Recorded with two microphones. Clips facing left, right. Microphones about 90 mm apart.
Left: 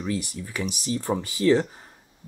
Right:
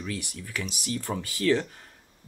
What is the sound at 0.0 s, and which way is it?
Speech, 20° left (ahead or behind).